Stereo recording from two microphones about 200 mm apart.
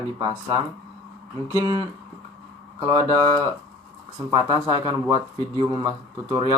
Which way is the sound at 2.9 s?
15° left (ahead or behind).